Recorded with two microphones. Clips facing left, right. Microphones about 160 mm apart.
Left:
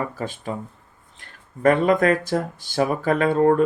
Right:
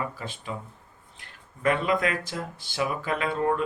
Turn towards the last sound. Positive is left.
turn(degrees=45)  # may be behind; listen again after turning